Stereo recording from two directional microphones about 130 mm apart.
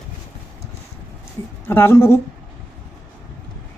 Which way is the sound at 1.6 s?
20° left (ahead or behind).